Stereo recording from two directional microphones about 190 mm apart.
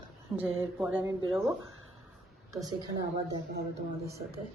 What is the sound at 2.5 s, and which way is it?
Speech, 20° right (ahead or behind).